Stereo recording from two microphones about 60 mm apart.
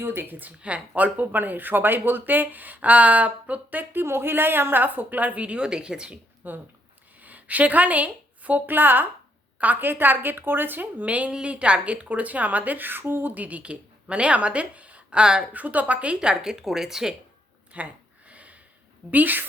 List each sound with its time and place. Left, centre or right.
0.0 s speech: right
4.0 s a woman's voice: right; by 6.1 s centre
6.4 s a woman's voice: right; by 15.4 s centre
15.5 s speech: right; by 17.2 s centre
17.7 s a sound: right
19.1 s speech: right